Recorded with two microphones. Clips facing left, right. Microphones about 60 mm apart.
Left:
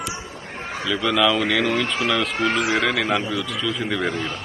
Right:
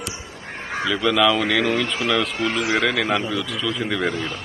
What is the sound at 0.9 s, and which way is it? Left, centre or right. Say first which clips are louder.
Speech: right 1 dB; centre.